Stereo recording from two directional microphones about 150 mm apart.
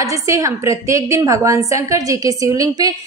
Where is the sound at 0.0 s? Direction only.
20° right (ahead or behind).